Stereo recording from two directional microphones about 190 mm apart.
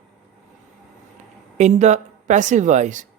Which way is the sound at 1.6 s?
35° right (ahead or behind).